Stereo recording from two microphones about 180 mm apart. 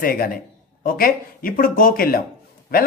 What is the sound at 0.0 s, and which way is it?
Speech, 55° left (ahead or behind).